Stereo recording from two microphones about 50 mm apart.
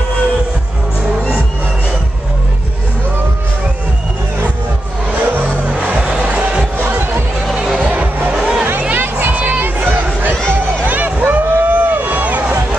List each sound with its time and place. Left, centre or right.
5.1 s music: right
5.8 s music: right
7.8 s music: right
8.3 s music: centre
8.9 s a sound: right
10.5 s run: right
10.9 s a sound: right